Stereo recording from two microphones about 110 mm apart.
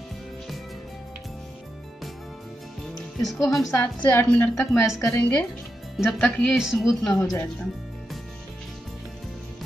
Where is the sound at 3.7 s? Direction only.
15° left (ahead or behind).